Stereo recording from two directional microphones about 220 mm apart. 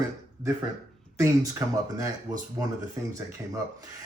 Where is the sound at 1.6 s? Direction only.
10° right (ahead or behind).